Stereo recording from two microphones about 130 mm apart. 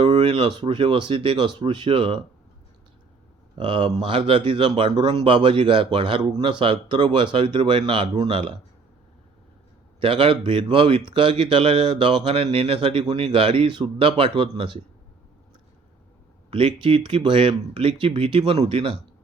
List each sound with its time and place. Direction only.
0.2 s speech: 40° right (ahead or behind)
3.6 s speech: 40° right (ahead or behind)
10.0 s speech: 40° right (ahead or behind)
16.5 s speech: 45° right (ahead or behind)